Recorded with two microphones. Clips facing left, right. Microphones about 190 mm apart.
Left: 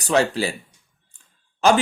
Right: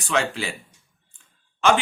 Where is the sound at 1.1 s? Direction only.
40° left (ahead or behind).